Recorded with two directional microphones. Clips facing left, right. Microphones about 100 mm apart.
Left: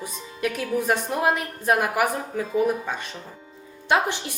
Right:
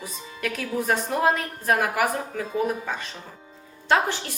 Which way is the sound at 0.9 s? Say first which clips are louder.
Right 2 dB; 15° left (ahead or behind).